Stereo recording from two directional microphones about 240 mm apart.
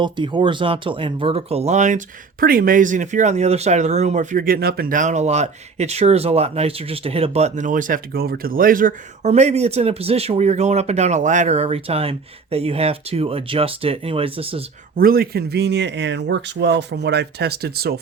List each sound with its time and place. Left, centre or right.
0.0 s speech: centre
14.9 s a man's voice: right